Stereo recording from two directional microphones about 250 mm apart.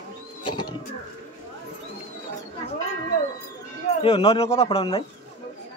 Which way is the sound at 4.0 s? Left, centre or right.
Left.